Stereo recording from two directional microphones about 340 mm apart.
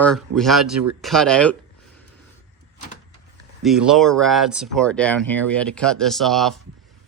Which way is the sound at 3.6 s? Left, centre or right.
Centre.